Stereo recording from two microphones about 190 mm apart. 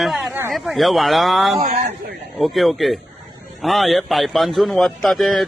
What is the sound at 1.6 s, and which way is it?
Speech, 45° right (ahead or behind).